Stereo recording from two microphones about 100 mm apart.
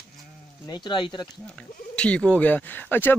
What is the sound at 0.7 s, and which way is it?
Speech, 50° left (ahead or behind).